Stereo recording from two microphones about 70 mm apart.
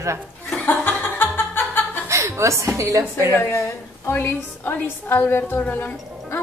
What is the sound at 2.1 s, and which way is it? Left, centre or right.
Speech, right.